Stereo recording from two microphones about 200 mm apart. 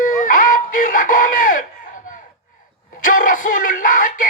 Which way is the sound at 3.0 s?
40° left (ahead or behind).